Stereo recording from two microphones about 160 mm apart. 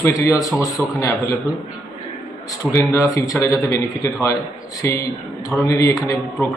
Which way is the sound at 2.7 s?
15° left (ahead or behind).